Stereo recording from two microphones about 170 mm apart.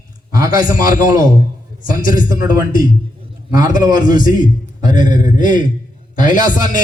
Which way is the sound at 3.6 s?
50° left (ahead or behind).